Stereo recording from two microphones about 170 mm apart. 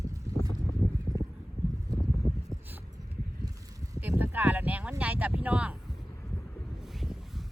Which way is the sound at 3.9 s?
10° right (ahead or behind).